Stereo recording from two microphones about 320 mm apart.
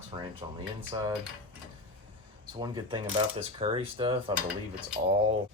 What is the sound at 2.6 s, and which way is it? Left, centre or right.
Speech, centre.